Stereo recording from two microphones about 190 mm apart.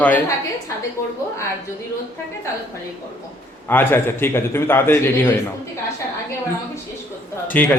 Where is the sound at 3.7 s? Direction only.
10° left (ahead or behind).